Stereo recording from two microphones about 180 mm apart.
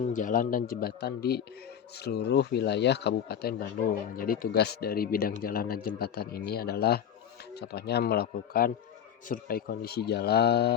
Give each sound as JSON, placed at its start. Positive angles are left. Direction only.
{"t": 0.1, "sound": "speech", "side_deg": 45}